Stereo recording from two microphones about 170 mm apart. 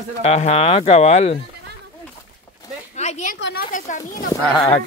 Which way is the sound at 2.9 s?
40° left (ahead or behind).